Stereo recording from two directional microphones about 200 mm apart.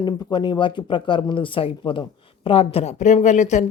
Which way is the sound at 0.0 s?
20° left (ahead or behind).